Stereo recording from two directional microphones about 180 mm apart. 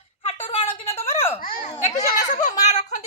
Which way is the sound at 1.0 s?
35° left (ahead or behind).